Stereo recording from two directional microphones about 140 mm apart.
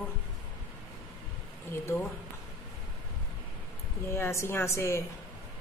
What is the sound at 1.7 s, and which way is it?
Speech, 15° left (ahead or behind).